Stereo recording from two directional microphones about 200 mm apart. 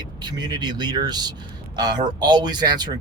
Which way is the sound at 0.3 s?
20° right (ahead or behind).